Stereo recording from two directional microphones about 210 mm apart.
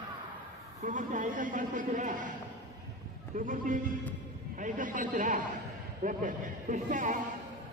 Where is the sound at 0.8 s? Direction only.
35° right (ahead or behind).